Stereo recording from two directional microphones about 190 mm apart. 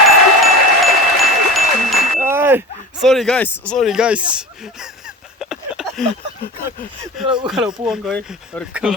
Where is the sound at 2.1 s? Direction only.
10° right (ahead or behind).